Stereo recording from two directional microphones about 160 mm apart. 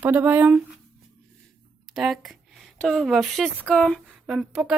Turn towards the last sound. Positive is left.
turn(degrees=0)  # may be behind; listen again after turning